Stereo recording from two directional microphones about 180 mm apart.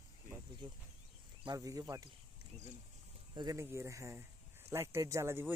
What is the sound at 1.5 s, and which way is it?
Speech, 20° right (ahead or behind).